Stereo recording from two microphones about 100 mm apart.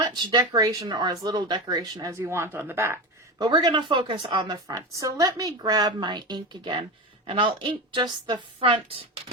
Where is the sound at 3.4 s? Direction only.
45° right (ahead or behind).